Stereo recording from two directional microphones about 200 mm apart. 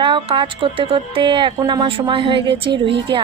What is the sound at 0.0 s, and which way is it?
A woman's voice, 25° right (ahead or behind).